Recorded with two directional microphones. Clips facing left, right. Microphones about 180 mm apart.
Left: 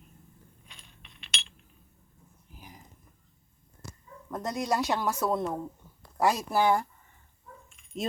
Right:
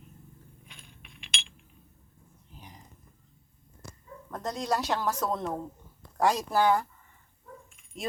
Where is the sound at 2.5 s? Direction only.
5° left (ahead or behind).